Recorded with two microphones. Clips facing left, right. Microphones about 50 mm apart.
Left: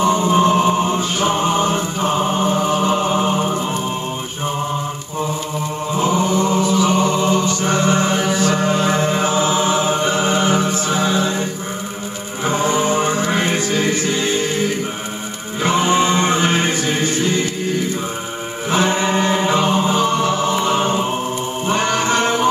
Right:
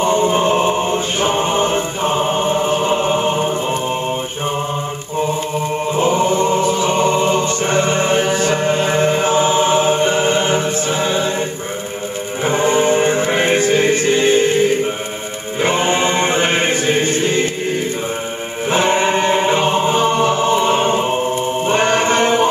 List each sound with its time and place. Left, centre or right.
0.0 s music: right
5.9 s music: right
12.4 s music: right
15.6 s chant: right
18.7 s choir: right